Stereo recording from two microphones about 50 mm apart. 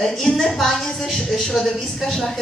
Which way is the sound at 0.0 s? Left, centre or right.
Centre.